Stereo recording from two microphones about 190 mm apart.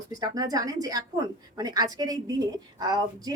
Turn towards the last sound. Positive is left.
turn(degrees=-20)  # may be behind; listen again after turning